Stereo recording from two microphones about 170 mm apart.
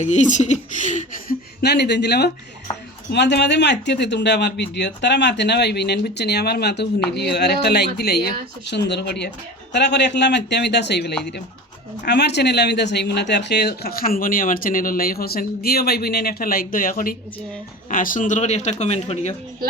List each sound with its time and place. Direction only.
0.0 s speech: 45° left (ahead or behind)
1.6 s speech: 80° left
3.1 s speech: 85° left; by 8.2 s 70° left (ahead or behind)
8.6 s speech: 90° left; by 19.3 s 40° left (ahead or behind)